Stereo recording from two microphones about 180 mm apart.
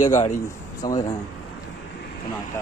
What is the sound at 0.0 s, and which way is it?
Speech, 40° left (ahead or behind).